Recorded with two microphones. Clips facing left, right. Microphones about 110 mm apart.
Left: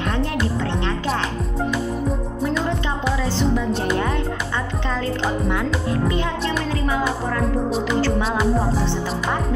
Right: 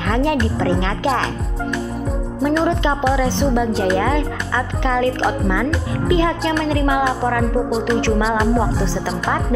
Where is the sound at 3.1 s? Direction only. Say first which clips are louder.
Right 4 dB; 70° right (ahead or behind).